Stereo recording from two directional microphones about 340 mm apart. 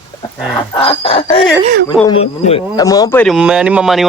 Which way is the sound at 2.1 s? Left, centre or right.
Centre.